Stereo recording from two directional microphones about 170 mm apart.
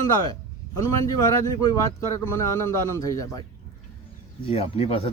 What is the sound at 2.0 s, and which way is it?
Speech, 15° left (ahead or behind).